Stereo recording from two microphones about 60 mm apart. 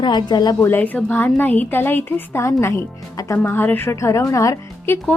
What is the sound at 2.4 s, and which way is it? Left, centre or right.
Speech, left.